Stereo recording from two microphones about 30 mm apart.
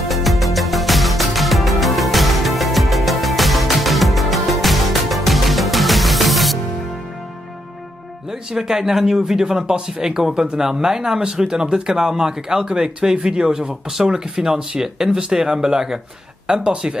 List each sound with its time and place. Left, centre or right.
0.1 s music: centre
8.3 s speech: centre
15.0 s speech: right
15.3 s speech: right